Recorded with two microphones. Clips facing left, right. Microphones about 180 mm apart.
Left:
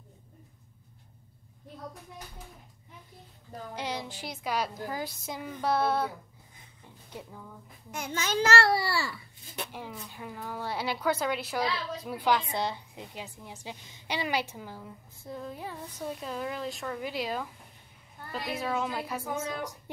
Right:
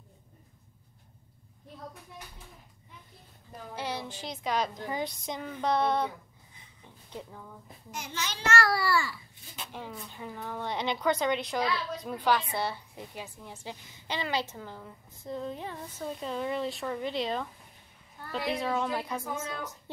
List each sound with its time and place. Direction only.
3.7 s a woman's voice: 15° left (ahead or behind)
7.9 s a child's voice: 55° left (ahead or behind)
8.5 s a child's voice: 30° left (ahead or behind)
9.7 s a woman's voice: 10° left (ahead or behind)